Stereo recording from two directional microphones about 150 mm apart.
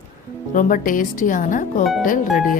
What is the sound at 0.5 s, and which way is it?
Speech, 65° left (ahead or behind).